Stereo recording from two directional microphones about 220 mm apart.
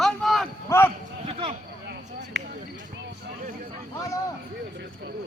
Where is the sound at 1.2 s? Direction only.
30° right (ahead or behind).